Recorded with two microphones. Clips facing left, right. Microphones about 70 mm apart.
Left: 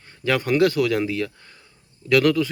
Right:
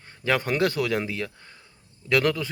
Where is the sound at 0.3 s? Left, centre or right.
Right.